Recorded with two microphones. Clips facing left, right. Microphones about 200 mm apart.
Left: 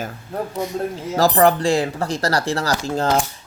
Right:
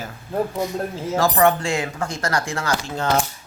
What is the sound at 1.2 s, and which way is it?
Speech, 35° left (ahead or behind).